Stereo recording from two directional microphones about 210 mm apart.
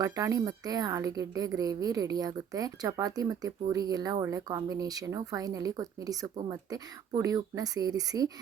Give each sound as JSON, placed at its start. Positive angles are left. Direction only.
{"t": 0.0, "sound": "a woman's voice", "side_deg": -15}